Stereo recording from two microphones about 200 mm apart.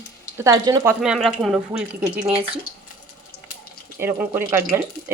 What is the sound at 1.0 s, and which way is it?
Speech, centre (ahead or behind).